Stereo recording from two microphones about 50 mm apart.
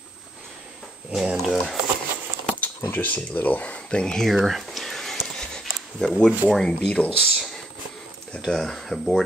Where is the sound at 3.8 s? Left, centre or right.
Centre.